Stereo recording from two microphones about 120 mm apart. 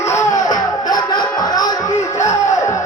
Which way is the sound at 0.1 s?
25° left (ahead or behind).